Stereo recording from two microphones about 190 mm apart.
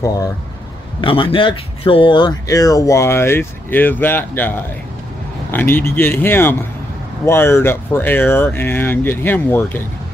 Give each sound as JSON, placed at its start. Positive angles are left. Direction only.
{"t": 1.0, "sound": "speech", "side_deg": 25}